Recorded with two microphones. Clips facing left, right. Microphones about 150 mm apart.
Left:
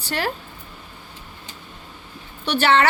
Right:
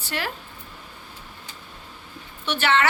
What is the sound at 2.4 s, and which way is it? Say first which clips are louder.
Speech: left 4 dB; 35° left (ahead or behind).